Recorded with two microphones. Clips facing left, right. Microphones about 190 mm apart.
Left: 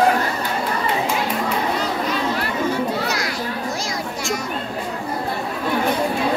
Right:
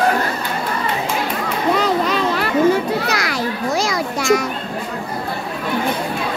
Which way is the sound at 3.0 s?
90° right.